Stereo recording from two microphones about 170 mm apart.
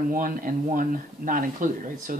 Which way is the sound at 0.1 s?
55° right (ahead or behind).